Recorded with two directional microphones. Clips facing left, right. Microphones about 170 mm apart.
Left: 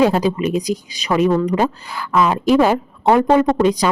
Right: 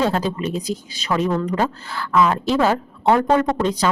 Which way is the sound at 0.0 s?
15° left (ahead or behind).